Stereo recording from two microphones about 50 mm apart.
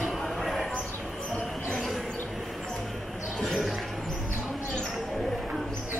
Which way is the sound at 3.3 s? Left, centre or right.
Centre.